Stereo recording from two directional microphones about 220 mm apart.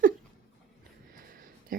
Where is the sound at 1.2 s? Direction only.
40° right (ahead or behind).